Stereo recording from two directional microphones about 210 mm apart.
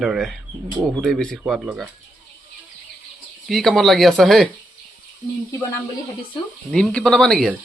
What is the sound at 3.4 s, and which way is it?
A man's voice, centre (ahead or behind).